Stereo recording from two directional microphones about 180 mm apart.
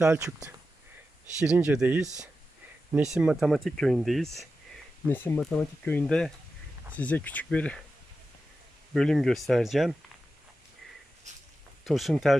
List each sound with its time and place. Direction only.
0.0 s speech: 15° right (ahead or behind)
1.4 s speech: 5° right (ahead or behind)
8.9 s speech: centre (ahead or behind)
11.9 s speech: centre (ahead or behind)